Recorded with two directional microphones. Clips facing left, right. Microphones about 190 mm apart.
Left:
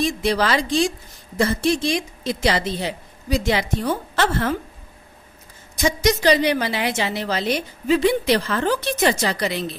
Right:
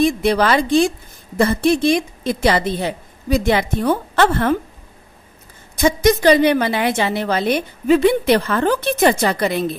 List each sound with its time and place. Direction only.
0.0 s a woman's voice: 55° right (ahead or behind)
5.8 s a woman's voice: 55° right (ahead or behind)